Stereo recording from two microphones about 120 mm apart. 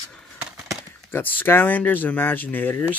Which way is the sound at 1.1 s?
15° left (ahead or behind).